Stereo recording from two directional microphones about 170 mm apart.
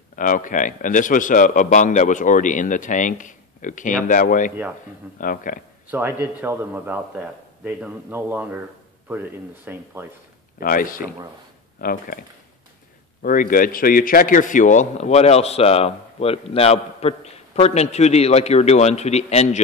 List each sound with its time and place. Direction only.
0.1 s speech: 50° left (ahead or behind)
5.9 s a man's voice: 10° right (ahead or behind)
10.6 s a man's voice: 55° left (ahead or behind)